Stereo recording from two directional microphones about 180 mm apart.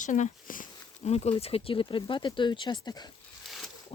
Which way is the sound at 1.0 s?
35° left (ahead or behind).